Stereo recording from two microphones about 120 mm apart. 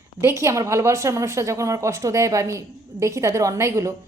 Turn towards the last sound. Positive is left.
turn(degrees=-25)  # may be behind; listen again after turning